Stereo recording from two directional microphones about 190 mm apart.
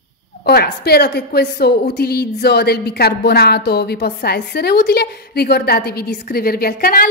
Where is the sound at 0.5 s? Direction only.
55° left (ahead or behind).